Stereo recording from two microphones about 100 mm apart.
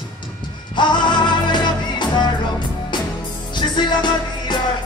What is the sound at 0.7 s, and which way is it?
Music, 50° left (ahead or behind).